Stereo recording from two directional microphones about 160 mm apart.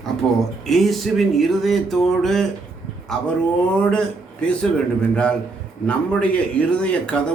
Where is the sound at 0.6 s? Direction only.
Centre (ahead or behind).